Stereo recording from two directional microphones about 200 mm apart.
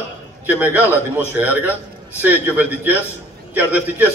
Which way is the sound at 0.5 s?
10° right (ahead or behind).